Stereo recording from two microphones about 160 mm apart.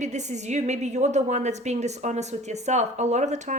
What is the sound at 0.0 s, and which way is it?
Speech, 45° right (ahead or behind).